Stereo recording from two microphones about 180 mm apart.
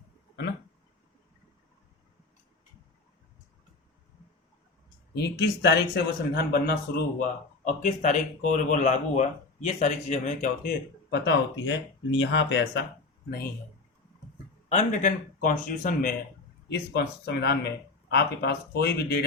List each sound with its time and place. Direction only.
5.1 s speech: 65° left (ahead or behind)
7.6 s speech: 40° left (ahead or behind); by 12.8 s 85° left
14.7 s speech: 45° left (ahead or behind)
16.6 s speech: 65° left (ahead or behind)